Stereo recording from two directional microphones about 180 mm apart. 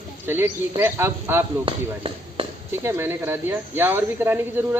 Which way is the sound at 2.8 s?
15° right (ahead or behind).